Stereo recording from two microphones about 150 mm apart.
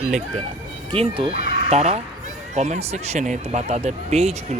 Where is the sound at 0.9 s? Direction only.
40° right (ahead or behind).